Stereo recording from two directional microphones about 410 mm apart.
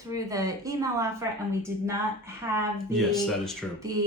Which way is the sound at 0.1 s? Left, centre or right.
Centre.